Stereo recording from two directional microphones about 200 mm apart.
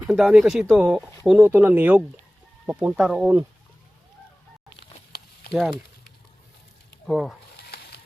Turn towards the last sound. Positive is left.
turn(degrees=50)  # may be behind; listen again after turning